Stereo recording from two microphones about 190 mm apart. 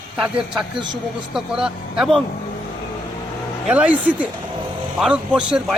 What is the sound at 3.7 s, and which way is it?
Speech, 5° right (ahead or behind).